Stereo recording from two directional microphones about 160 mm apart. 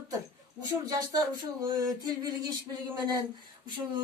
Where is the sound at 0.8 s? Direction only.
25° right (ahead or behind).